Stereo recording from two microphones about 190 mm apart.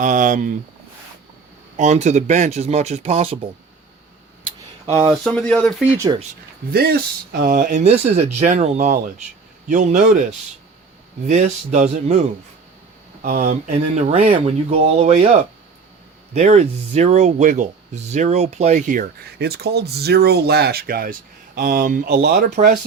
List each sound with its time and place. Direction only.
0.0 s speech: 40° right (ahead or behind)
1.7 s speech: 40° right (ahead or behind)
4.5 s a sound: 25° right (ahead or behind)
5.2 s speech: 5° left (ahead or behind)
5.8 s speech: 10° right (ahead or behind)
6.7 s speech: 55° right (ahead or behind)
11.3 s speech: 35° right (ahead or behind)
13.2 s speech: 40° right (ahead or behind)